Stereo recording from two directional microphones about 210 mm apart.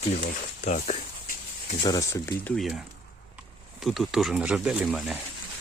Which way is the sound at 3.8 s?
Centre (ahead or behind).